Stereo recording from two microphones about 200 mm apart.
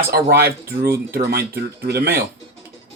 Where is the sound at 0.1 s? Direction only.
50° right (ahead or behind).